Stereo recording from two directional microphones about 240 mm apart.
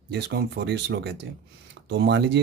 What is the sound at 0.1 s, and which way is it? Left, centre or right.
Speech, right.